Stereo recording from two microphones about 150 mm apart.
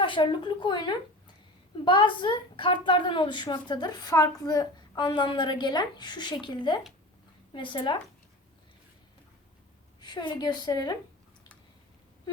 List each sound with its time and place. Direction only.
0.0 s a woman's voice: 35° left (ahead or behind)
10.0 s a woman's voice: 30° left (ahead or behind)